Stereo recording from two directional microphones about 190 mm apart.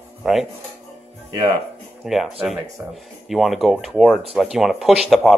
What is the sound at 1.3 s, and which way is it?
Speech, 25° right (ahead or behind).